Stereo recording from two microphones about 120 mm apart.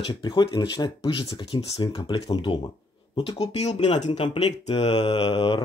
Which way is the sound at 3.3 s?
65° left (ahead or behind).